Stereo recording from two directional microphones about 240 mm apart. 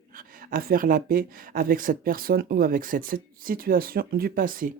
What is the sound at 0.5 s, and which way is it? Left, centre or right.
Speech, right.